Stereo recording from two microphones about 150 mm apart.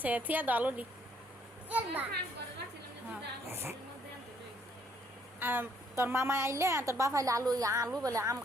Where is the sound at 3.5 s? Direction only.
15° right (ahead or behind).